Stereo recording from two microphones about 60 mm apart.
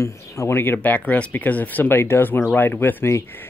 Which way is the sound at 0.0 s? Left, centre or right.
Left.